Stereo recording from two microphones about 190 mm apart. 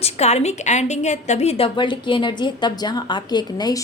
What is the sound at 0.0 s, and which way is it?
A woman's voice, 35° left (ahead or behind).